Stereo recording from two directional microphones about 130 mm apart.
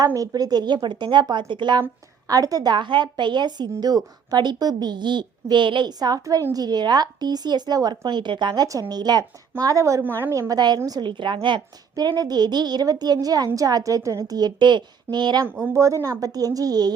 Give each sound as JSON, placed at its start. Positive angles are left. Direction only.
{"t": 0.0, "sound": "a woman's voice", "side_deg": -30}
{"t": 15.6, "sound": "a woman's voice", "side_deg": -25}